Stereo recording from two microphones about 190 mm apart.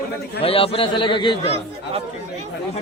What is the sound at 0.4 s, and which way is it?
A man's voice, 30° left (ahead or behind).